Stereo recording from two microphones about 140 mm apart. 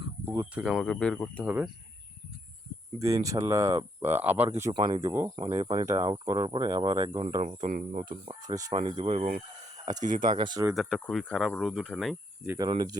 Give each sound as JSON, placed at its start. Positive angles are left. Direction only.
{"t": 0.3, "sound": "speech", "side_deg": -10}
{"t": 1.5, "sound": "speech", "side_deg": -10}
{"t": 3.0, "sound": "speech", "side_deg": -25}
{"t": 4.7, "sound": "speech", "side_deg": -35}
{"t": 4.9, "sound": "speech", "side_deg": -20}
{"t": 5.4, "sound": "speech", "side_deg": -35}
{"t": 7.4, "sound": "speech", "side_deg": -70}
{"t": 8.0, "sound": "speech", "side_deg": -35}
{"t": 10.2, "sound": "speech", "side_deg": -35}
{"t": 10.7, "sound": "speech", "side_deg": 0}
{"t": 12.5, "sound": "speech", "side_deg": -30}